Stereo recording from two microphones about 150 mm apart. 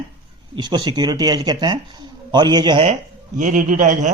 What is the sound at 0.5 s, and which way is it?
Speech, 30° right (ahead or behind).